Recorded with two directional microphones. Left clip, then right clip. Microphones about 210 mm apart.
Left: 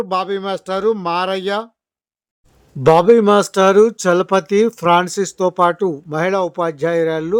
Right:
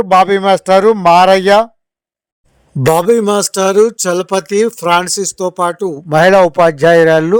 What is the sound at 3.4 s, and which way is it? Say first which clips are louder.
Speech: right 1 dB; 25° right (ahead or behind).